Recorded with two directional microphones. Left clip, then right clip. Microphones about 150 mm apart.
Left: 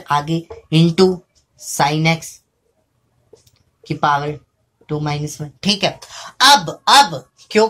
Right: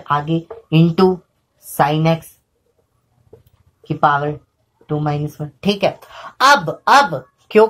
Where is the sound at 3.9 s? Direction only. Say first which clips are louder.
Right 2 dB; 35° right (ahead or behind).